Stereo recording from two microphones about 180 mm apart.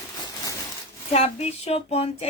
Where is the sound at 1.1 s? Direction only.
35° left (ahead or behind).